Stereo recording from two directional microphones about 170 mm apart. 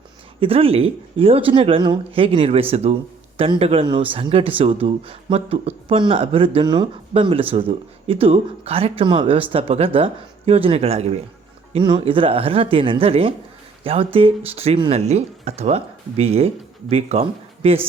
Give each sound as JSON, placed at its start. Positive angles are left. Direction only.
{"t": 0.3, "sound": "speech", "side_deg": -35}